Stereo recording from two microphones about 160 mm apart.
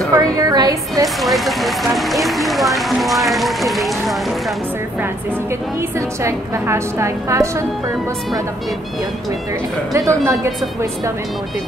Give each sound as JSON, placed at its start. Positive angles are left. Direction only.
{"t": 0.1, "sound": "music", "side_deg": -20}
{"t": 1.0, "sound": "speech", "side_deg": 0}
{"t": 5.8, "sound": "a woman's voice", "side_deg": -15}
{"t": 9.9, "sound": "speech", "side_deg": -20}